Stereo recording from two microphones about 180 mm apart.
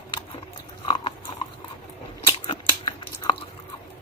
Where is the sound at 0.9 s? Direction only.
30° left (ahead or behind).